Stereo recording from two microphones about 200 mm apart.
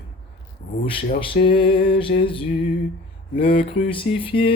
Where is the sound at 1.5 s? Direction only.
25° left (ahead or behind).